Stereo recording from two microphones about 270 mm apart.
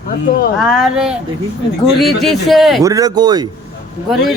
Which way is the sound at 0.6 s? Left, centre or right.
Centre.